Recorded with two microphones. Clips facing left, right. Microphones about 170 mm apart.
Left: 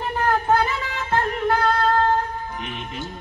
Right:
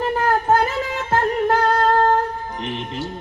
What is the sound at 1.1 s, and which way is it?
Singing, 45° right (ahead or behind).